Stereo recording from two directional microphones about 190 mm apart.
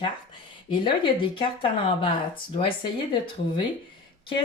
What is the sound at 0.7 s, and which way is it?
Speech, 25° left (ahead or behind).